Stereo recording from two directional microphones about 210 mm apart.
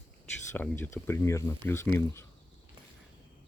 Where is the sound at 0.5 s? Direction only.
10° left (ahead or behind).